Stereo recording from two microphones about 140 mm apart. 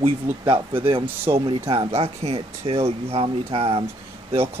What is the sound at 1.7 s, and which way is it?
Speech, 40° right (ahead or behind).